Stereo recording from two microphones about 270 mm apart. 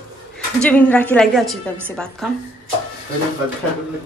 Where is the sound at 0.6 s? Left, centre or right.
Centre.